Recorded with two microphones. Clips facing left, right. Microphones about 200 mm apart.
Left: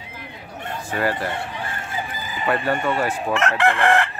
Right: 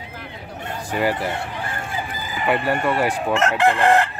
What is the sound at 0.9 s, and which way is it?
Speech, 15° right (ahead or behind).